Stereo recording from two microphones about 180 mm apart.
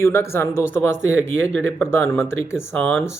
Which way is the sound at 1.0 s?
90° right.